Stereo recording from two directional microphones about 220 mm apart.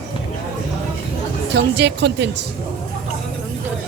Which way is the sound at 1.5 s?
50° right (ahead or behind).